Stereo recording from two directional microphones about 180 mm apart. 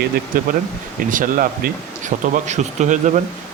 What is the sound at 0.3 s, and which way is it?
Speech, 50° right (ahead or behind).